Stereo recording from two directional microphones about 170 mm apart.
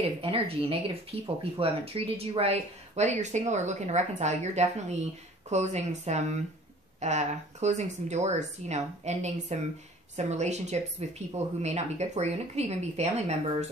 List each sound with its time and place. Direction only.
0.2 s speech: 35° right (ahead or behind)